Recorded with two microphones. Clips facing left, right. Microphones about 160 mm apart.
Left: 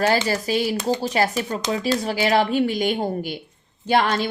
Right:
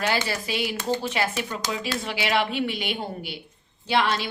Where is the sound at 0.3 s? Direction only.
40° left (ahead or behind).